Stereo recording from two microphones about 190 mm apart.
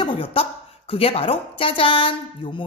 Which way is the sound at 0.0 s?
25° left (ahead or behind).